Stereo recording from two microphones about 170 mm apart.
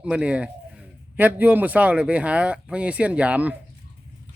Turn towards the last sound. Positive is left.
turn(degrees=-10)  # may be behind; listen again after turning